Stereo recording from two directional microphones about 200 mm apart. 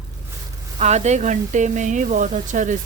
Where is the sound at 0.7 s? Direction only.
35° right (ahead or behind).